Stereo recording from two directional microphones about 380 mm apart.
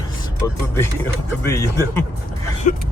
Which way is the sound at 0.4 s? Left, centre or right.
Centre.